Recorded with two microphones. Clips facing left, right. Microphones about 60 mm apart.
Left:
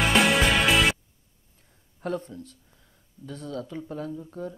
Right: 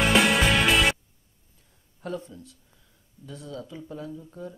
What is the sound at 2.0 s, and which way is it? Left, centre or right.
Speech, left.